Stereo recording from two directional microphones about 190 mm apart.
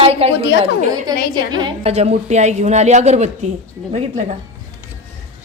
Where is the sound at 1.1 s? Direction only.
20° right (ahead or behind); by 3.2 s 35° right (ahead or behind).